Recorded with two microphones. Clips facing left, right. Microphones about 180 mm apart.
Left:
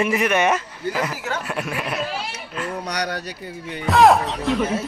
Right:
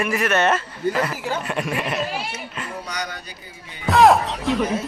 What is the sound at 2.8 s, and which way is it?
Speech, 70° left (ahead or behind).